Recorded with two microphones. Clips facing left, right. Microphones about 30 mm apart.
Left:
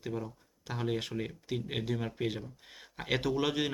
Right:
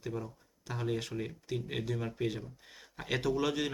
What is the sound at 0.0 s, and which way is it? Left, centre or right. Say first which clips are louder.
Speech: left 1 dB; centre.